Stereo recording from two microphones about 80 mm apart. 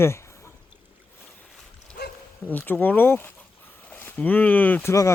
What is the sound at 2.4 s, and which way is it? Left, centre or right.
Speech, left.